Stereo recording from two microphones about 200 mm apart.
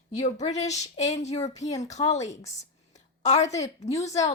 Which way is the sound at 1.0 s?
35° left (ahead or behind).